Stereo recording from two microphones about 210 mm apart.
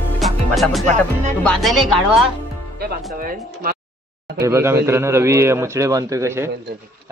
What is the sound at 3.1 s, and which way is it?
Speech, 45° right (ahead or behind).